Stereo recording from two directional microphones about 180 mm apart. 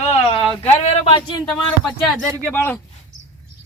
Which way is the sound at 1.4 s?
5° left (ahead or behind).